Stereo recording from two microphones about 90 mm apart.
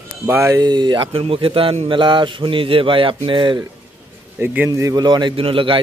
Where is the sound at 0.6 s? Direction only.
55° right (ahead or behind).